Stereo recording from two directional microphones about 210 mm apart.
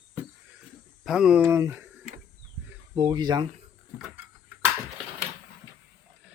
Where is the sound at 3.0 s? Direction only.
20° right (ahead or behind).